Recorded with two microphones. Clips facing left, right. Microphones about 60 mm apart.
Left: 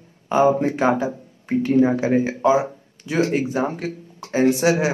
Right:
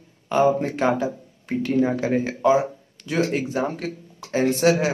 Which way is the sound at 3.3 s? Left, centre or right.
Centre.